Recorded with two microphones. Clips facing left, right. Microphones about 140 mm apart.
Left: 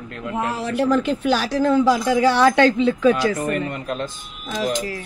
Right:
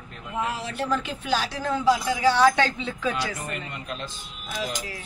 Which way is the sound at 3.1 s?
50° left (ahead or behind).